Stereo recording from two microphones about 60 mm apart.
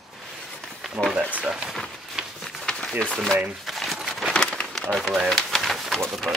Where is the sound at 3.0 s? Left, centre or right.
Centre.